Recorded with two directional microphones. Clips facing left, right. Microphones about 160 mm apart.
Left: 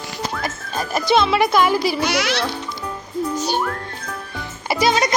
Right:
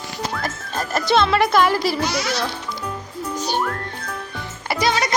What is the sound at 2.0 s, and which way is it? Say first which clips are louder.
Speech: left 2 dB; 75° left (ahead or behind).